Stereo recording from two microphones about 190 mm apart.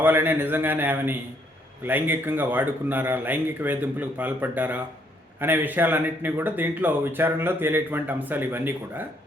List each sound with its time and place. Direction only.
0.0 s speech: 10° right (ahead or behind)